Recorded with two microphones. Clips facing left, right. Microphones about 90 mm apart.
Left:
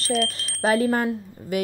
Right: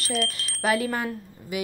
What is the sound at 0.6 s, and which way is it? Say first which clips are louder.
A woman's voice: left 4 dB; 35° left (ahead or behind).